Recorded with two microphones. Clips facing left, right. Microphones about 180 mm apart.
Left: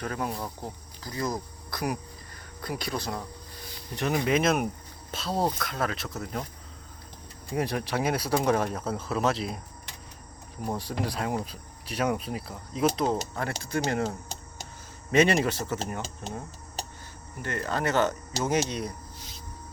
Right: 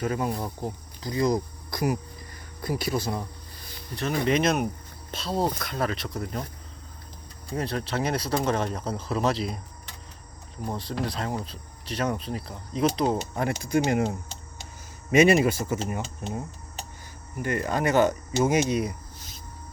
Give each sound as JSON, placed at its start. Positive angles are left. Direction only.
{"t": 0.0, "sound": "speech", "side_deg": -5}
{"t": 0.4, "sound": "speech", "side_deg": -15}
{"t": 3.9, "sound": "speech", "side_deg": 15}
{"t": 4.3, "sound": "speech", "side_deg": 5}
{"t": 7.5, "sound": "speech", "side_deg": 15}
{"t": 10.7, "sound": "speech", "side_deg": 10}
{"t": 13.3, "sound": "speech", "side_deg": -15}
{"t": 15.1, "sound": "speech", "side_deg": -10}
{"t": 17.4, "sound": "speech", "side_deg": -10}